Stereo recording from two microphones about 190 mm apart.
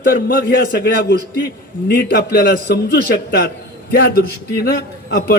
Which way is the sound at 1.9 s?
50° left (ahead or behind).